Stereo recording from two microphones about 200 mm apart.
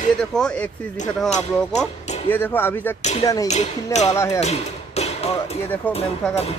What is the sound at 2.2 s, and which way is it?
Speech, 10° left (ahead or behind).